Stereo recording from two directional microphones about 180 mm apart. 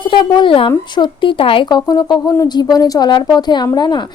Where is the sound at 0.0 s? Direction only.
25° left (ahead or behind).